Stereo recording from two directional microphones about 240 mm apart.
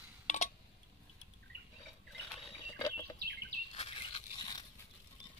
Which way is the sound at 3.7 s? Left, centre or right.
Left.